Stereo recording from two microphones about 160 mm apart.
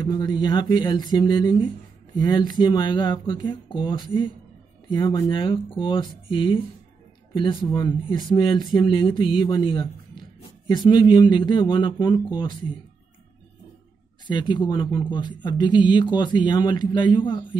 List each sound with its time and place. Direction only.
0.0 s speech: 25° left (ahead or behind)
14.2 s speech: 30° left (ahead or behind)